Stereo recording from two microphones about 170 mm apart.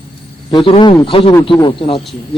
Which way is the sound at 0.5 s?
30° left (ahead or behind).